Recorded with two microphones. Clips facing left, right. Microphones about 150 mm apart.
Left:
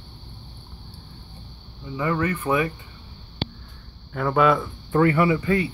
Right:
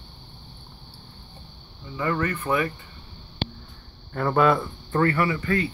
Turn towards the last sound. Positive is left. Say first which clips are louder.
# left 4 dB
turn(degrees=15)  # may be behind; listen again after turning